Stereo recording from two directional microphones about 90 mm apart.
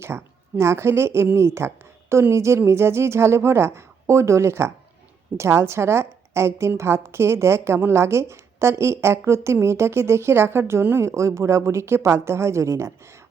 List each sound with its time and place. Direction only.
0.1 s a woman's voice: 20° right (ahead or behind)
0.5 s a woman's voice: 30° right (ahead or behind)